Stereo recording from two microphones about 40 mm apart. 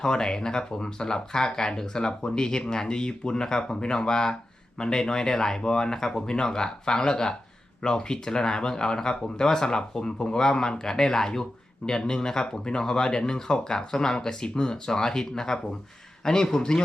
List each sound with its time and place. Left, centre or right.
0.0 s speech: centre